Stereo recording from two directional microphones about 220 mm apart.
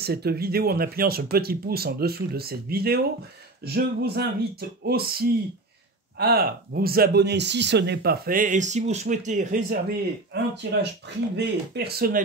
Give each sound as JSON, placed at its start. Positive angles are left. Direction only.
{"t": 0.0, "sound": "speech", "side_deg": -45}
{"t": 10.3, "sound": "speech", "side_deg": -50}